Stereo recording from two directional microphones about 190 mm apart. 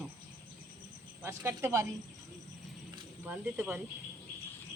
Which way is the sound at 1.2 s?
10° right (ahead or behind).